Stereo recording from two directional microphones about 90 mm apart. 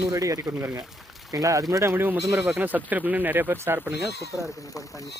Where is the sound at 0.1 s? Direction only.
35° right (ahead or behind).